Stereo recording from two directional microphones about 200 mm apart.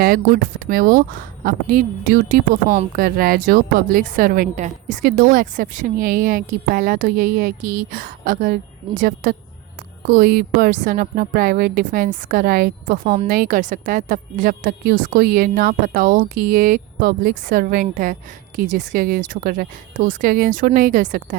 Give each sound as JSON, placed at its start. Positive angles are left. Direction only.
{"t": 0.0, "sound": "a woman's voice", "side_deg": -45}